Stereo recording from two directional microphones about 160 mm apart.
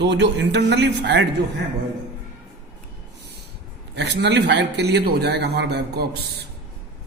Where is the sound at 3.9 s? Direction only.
90° right.